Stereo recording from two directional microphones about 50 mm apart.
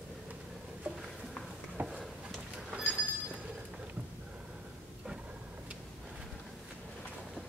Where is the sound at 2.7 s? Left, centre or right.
Centre.